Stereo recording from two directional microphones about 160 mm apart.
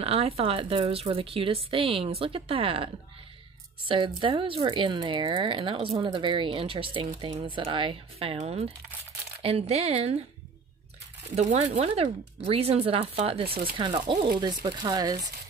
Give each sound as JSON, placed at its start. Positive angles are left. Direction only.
{"t": 0.0, "sound": "a woman's voice", "side_deg": -40}
{"t": 11.3, "sound": "a woman's voice", "side_deg": -45}